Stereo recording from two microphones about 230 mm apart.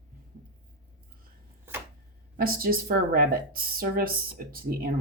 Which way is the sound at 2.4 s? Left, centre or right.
Right.